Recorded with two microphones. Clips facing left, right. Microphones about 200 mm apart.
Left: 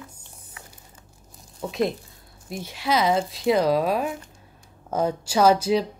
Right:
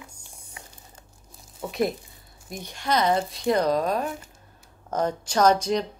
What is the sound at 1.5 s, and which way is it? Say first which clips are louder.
Speech: left 1 dB; centre (ahead or behind).